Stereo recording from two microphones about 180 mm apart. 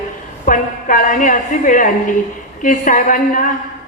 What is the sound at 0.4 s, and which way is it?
Speech, 45° left (ahead or behind).